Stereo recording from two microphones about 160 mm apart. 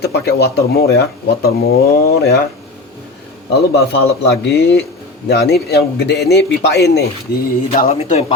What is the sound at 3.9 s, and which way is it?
A man's voice, 90° left.